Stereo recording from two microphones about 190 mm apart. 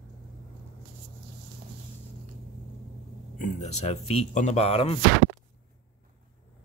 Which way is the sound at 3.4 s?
35° left (ahead or behind).